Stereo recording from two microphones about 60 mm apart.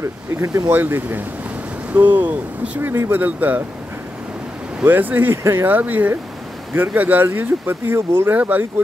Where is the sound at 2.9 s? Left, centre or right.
Right.